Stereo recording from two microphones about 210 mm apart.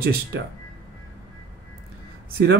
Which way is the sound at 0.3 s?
55° right (ahead or behind).